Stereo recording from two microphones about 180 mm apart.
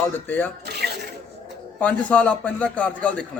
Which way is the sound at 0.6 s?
65° right (ahead or behind).